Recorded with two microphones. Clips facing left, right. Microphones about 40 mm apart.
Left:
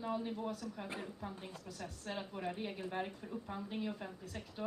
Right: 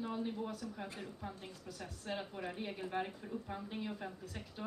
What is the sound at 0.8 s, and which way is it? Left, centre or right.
Speech, centre.